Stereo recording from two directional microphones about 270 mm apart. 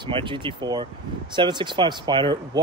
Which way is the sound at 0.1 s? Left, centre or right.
Centre.